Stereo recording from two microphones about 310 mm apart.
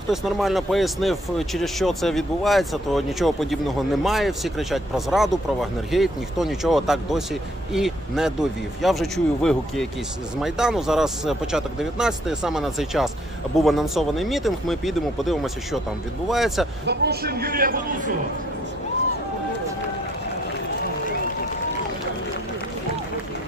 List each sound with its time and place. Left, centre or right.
0.1 s speech: centre
16.8 s a man's voice: right